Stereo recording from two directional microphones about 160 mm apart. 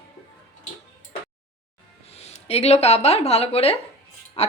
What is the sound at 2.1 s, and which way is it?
Speech, 40° left (ahead or behind).